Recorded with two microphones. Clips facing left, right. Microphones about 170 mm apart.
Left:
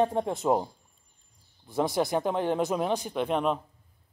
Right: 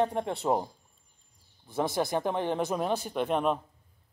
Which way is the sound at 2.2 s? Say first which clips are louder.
Left 2 dB; 15° left (ahead or behind).